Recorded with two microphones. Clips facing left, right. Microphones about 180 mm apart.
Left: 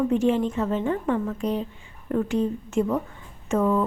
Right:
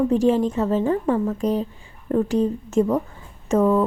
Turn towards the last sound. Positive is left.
turn(degrees=-40)  # may be behind; listen again after turning